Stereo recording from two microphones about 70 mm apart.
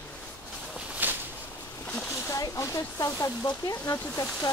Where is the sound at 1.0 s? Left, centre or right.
Right.